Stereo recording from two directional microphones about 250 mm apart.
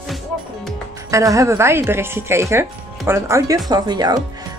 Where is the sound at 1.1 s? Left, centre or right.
Centre.